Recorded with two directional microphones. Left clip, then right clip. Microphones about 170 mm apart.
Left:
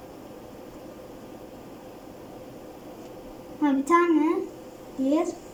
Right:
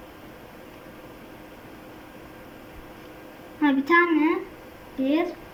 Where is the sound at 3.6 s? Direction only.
10° left (ahead or behind).